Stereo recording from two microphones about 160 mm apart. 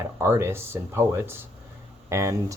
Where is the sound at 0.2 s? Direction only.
15° right (ahead or behind).